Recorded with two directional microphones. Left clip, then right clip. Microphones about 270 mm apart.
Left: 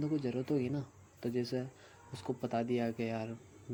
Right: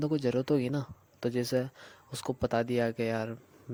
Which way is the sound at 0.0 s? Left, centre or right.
Right.